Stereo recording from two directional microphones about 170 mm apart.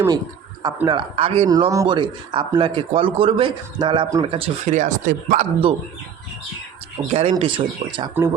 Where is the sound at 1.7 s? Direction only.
25° right (ahead or behind); by 5.5 s 50° right (ahead or behind).